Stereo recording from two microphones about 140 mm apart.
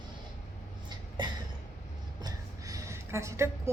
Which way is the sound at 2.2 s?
25° right (ahead or behind).